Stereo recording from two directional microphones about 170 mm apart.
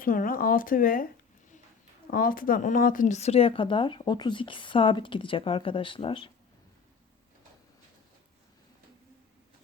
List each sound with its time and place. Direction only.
0.0 s speech: 55° left (ahead or behind)
2.0 s speech: 55° left (ahead or behind); by 6.3 s 30° left (ahead or behind)